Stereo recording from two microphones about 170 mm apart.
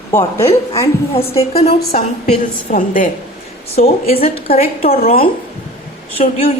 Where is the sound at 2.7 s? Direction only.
55° left (ahead or behind).